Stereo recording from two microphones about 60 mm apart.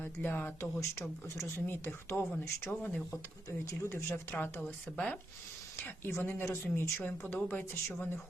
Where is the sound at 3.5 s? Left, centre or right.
Left.